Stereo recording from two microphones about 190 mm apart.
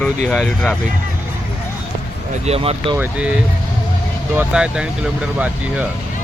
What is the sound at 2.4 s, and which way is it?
Speech, 30° right (ahead or behind).